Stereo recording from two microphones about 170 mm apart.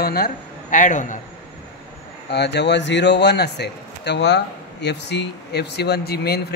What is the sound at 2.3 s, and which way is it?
Speech, 85° left.